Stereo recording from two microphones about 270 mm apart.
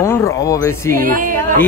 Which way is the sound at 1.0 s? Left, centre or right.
Right.